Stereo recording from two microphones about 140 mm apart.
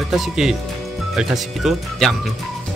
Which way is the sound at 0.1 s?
Centre (ahead or behind).